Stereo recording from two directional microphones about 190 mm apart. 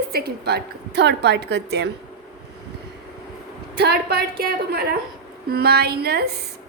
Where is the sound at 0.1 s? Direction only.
55° right (ahead or behind).